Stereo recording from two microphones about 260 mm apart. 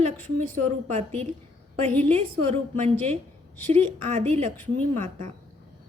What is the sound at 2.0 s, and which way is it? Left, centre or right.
A woman's voice, right.